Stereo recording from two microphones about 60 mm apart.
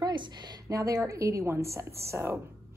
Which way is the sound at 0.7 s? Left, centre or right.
Right.